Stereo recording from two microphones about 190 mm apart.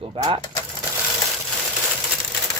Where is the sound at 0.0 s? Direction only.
25° right (ahead or behind).